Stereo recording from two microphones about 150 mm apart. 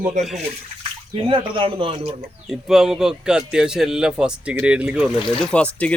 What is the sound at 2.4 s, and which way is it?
A man's voice, 5° right (ahead or behind).